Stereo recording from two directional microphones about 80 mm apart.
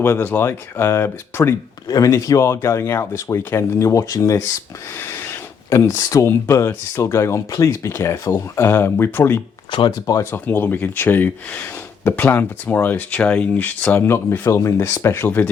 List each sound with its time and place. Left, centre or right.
0.0 s speech: left
1.9 s speech: left
4.9 s a sound: left
5.7 s speech: left